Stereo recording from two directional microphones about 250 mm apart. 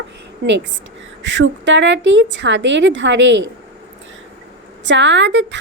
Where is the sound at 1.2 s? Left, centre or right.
Right.